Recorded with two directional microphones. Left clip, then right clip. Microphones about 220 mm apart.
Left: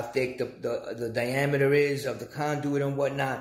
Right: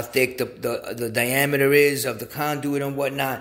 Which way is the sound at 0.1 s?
35° right (ahead or behind).